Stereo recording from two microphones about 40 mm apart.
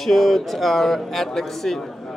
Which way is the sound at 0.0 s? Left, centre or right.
Centre.